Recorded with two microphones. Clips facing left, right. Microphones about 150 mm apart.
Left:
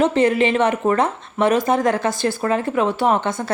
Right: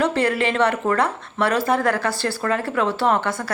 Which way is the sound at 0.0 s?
20° left (ahead or behind).